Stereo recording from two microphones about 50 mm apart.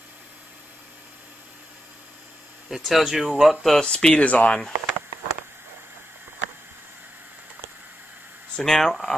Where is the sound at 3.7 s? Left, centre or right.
Centre.